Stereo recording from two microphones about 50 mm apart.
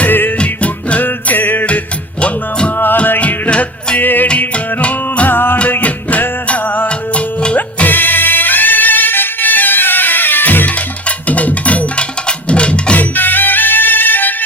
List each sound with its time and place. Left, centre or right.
0.0 s music: left
0.3 s music: left
1.0 s music: left
2.2 s music: left
2.7 s music: left
3.2 s music: left
4.4 s music: left
5.3 s music: left
5.8 s music: left
11.3 s music: left
13.0 s music: left